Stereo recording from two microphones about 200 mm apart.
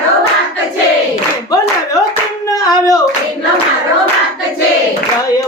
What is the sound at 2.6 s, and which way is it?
Hands, 20° left (ahead or behind).